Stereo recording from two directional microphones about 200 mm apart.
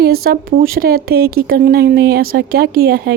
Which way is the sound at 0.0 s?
50° right (ahead or behind).